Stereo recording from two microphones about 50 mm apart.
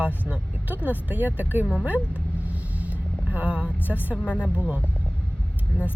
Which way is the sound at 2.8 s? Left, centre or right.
Right.